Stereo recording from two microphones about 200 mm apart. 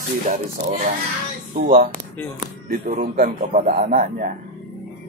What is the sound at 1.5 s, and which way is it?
Speech, 45° right (ahead or behind).